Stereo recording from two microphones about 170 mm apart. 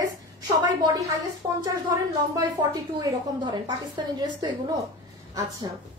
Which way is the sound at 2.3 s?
25° right (ahead or behind).